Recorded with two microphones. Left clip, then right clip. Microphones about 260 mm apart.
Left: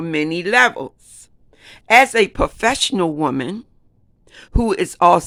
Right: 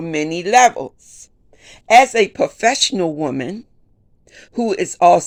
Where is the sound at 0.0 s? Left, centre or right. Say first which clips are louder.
Even; centre.